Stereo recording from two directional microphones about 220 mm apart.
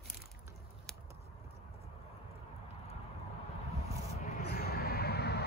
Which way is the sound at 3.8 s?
30° left (ahead or behind).